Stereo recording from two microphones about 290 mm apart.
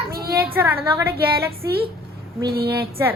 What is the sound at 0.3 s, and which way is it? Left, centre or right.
Speech, centre.